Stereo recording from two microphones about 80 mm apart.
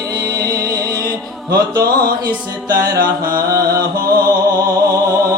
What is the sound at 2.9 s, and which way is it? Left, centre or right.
Music, right.